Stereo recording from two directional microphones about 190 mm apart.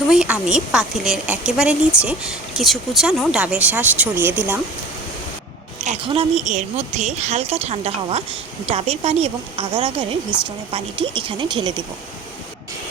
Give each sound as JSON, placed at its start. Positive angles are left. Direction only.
{"t": 0.1, "sound": "speech", "side_deg": -5}
{"t": 6.1, "sound": "a woman's voice", "side_deg": -30}